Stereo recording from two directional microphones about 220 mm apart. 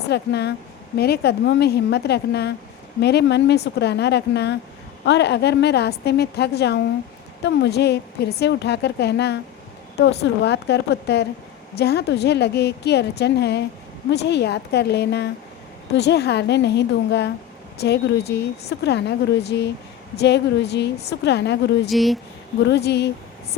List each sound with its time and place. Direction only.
0.0 s a woman's voice: 50° left (ahead or behind)
21.8 s speech: centre (ahead or behind)
22.6 s a woman's voice: 50° left (ahead or behind)